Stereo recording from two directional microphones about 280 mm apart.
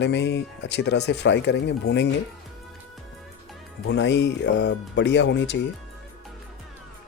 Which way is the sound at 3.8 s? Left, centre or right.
Left.